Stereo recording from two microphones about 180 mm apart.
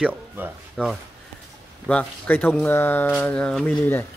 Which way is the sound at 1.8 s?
10° left (ahead or behind).